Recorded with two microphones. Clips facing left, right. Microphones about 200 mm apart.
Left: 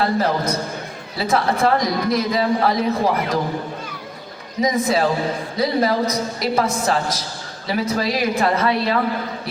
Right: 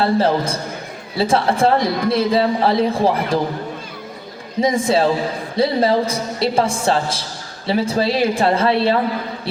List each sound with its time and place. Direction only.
0.0 s a man's voice: 30° right (ahead or behind)
4.6 s a man's voice: 30° right (ahead or behind)